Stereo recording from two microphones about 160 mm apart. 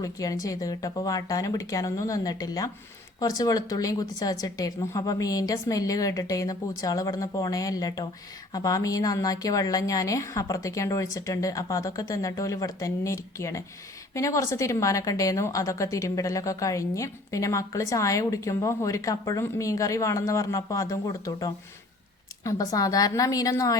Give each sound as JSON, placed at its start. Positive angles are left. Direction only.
{"t": 0.0, "sound": "a woman's voice", "side_deg": 20}